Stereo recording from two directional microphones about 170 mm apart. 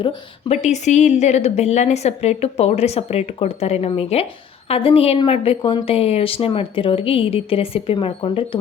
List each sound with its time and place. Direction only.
0.0 s speech: 40° left (ahead or behind)